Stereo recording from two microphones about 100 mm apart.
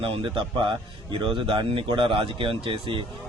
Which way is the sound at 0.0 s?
65° right (ahead or behind).